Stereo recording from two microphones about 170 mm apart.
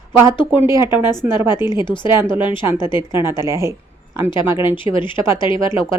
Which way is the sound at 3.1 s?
15° right (ahead or behind).